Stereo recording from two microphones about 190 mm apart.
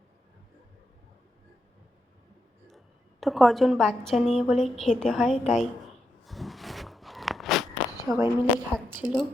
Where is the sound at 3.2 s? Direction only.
Centre (ahead or behind).